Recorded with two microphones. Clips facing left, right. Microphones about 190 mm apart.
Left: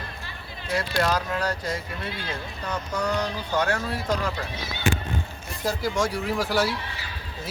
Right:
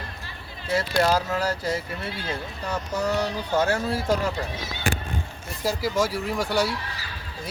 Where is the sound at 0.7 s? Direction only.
30° right (ahead or behind).